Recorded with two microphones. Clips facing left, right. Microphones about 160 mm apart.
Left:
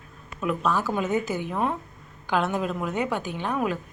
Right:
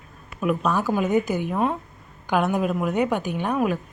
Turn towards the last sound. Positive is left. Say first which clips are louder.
# right 4 dB
turn(degrees=-15)  # may be behind; listen again after turning